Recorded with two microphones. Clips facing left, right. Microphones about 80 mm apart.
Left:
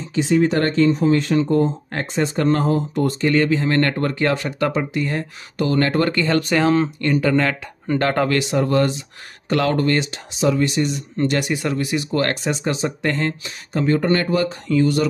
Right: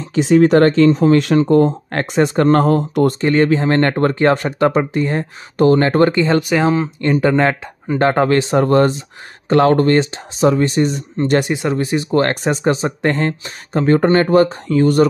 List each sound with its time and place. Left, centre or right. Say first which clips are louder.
0.1 s speech: right 6 dB; right
1.7 s speech: right 5 dB; right
3.2 s speech: right 4 dB; right
6.1 s speech: right 4 dB; right
8.5 s speech: right 5 dB; right